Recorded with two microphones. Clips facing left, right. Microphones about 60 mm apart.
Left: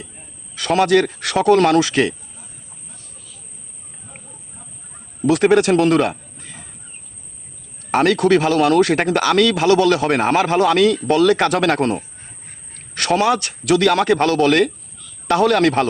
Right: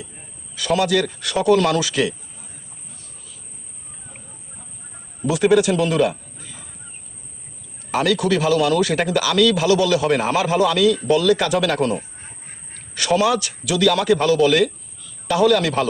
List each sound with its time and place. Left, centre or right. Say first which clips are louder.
0.5 s speech: left 4 dB; left
1.2 s speech: left 3 dB; left
5.2 s speech: left 2 dB; left
7.9 s speech: left 4 dB; left